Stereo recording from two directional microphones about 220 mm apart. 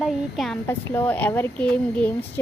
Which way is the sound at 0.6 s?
10° left (ahead or behind).